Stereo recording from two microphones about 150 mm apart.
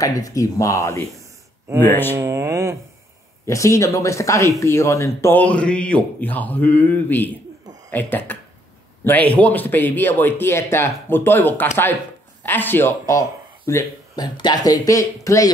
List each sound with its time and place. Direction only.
0.0 s speech: 25° left (ahead or behind)
2.1 s speech: 20° right (ahead or behind)
3.4 s speech: 20° left (ahead or behind)